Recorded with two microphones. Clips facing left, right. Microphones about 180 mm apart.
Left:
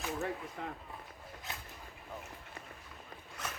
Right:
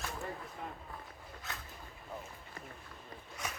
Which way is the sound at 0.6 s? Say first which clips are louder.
Left 3 dB; 75° left (ahead or behind).